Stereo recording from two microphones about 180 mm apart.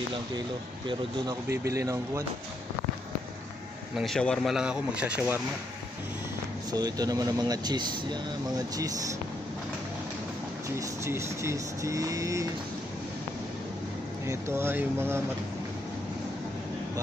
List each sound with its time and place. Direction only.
0.8 s speech: 20° right (ahead or behind)
3.9 s speech: centre (ahead or behind)
6.7 s speech: 20° right (ahead or behind)
10.8 s speech: 15° right (ahead or behind)
14.2 s speech: 15° right (ahead or behind)